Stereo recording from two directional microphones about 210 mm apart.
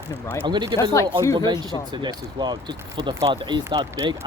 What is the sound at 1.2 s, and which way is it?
Speech, 15° left (ahead or behind).